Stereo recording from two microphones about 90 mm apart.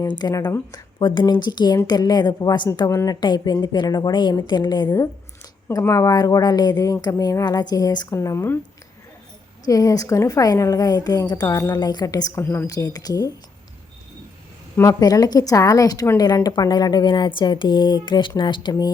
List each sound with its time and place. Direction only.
0.1 s a woman's voice: 50° left (ahead or behind)
5.8 s speech: 35° left (ahead or behind)
9.6 s a woman's voice: 40° left (ahead or behind)
12.4 s a woman's voice: 30° left (ahead or behind)
12.6 s speech: 40° left (ahead or behind)
14.9 s a woman's voice: 45° left (ahead or behind)